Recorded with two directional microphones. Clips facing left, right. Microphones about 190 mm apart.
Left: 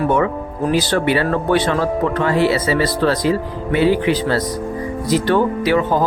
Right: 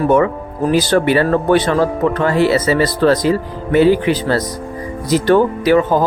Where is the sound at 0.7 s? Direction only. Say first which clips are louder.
Right 4 dB; 45° right (ahead or behind).